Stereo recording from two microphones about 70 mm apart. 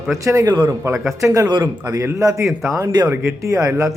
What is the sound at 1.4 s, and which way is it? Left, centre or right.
Speech, right.